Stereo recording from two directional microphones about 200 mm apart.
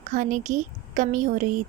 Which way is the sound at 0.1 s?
40° right (ahead or behind).